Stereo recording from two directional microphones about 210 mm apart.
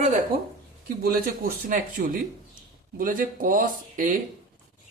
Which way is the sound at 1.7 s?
40° right (ahead or behind).